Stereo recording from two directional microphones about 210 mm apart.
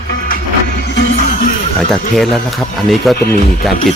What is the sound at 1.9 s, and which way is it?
Speech, centre (ahead or behind).